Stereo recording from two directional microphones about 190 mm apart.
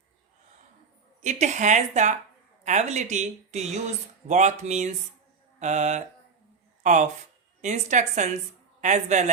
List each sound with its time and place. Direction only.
1.2 s speech: 40° right (ahead or behind)
5.5 s mantra: 40° right (ahead or behind)
6.8 s speech: 40° right (ahead or behind)